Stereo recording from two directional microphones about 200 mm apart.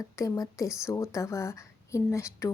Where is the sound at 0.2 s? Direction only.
15° left (ahead or behind).